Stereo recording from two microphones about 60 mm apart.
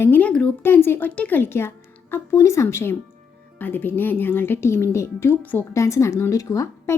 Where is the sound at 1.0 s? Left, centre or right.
Left.